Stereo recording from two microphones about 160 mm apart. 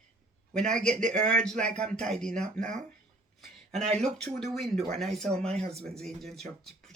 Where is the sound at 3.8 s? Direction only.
45° right (ahead or behind).